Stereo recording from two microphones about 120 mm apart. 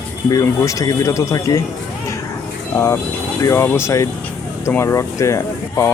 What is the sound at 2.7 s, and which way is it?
Speech, 25° left (ahead or behind).